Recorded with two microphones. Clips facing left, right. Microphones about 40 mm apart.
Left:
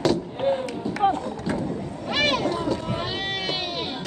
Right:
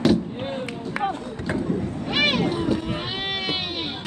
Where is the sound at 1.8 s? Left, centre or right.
Centre.